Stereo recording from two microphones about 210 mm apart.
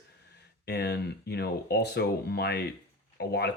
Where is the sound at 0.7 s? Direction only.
50° left (ahead or behind).